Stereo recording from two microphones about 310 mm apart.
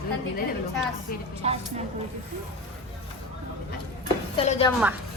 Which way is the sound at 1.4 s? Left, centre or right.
Centre.